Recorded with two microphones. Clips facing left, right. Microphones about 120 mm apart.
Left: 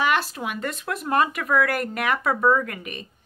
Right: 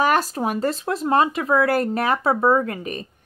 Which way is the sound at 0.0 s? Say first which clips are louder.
Right 4 dB; 40° right (ahead or behind).